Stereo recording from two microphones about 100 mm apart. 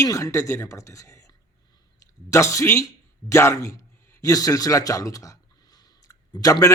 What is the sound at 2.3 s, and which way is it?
Speech, 30° left (ahead or behind).